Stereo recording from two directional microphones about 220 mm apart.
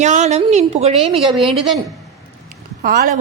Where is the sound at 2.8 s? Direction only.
40° right (ahead or behind).